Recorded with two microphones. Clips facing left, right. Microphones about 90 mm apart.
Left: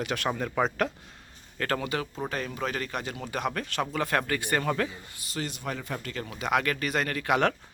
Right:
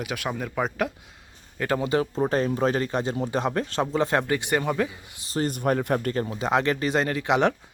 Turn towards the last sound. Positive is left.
turn(degrees=-20)  # may be behind; listen again after turning